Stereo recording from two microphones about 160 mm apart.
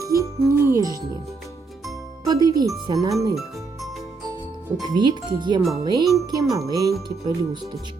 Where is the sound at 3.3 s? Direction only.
Centre (ahead or behind).